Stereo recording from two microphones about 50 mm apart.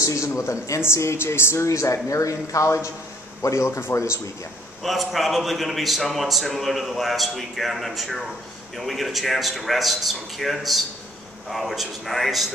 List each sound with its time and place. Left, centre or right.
0.0 s speech: left
0.7 s speech: left
4.8 s a man's voice: centre